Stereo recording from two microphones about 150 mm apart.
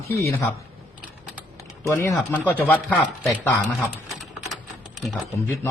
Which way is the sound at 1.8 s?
20° left (ahead or behind).